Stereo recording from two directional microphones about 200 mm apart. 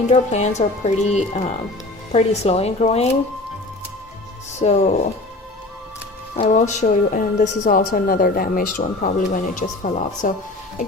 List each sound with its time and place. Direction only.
0.1 s a woman's voice: 35° left (ahead or behind)
4.6 s a woman's voice: 35° left (ahead or behind)
6.3 s a woman's voice: 35° left (ahead or behind)